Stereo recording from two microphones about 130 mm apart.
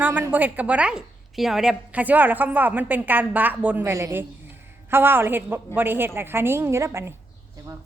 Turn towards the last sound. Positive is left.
turn(degrees=-20)  # may be behind; listen again after turning